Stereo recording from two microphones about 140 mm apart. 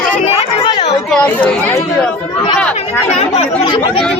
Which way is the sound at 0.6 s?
35° left (ahead or behind).